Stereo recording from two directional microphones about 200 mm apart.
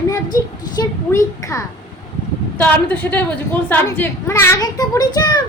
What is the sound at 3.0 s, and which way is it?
A child's voice, 5° left (ahead or behind).